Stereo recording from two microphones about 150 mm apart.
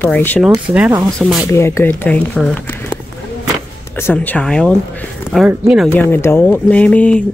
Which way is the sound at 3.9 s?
15° left (ahead or behind).